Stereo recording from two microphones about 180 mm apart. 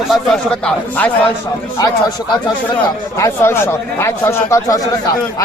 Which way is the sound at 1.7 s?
20° left (ahead or behind).